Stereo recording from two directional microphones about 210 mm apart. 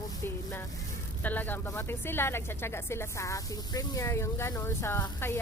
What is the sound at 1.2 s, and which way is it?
A woman's voice, 10° left (ahead or behind).